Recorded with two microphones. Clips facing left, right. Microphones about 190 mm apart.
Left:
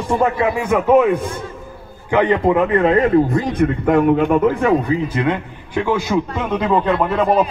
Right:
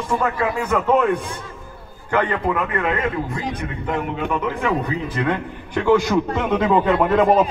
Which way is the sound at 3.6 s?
55° left (ahead or behind).